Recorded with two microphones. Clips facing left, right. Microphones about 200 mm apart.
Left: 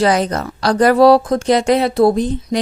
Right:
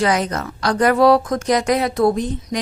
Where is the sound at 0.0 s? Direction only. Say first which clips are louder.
Left 4 dB; 35° left (ahead or behind).